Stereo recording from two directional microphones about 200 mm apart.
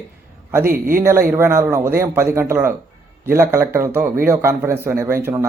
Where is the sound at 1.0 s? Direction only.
10° right (ahead or behind).